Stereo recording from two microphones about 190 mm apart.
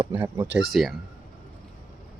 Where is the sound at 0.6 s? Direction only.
Centre (ahead or behind).